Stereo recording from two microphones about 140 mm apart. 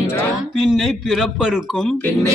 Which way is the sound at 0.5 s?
Centre (ahead or behind).